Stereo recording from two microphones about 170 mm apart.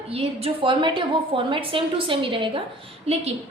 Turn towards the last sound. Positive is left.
turn(degrees=-40)  # may be behind; listen again after turning